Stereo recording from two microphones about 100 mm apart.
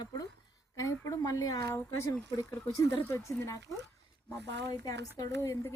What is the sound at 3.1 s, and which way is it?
Speech, 30° left (ahead or behind).